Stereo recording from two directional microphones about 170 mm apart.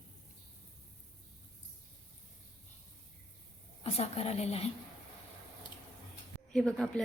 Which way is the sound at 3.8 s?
35° left (ahead or behind).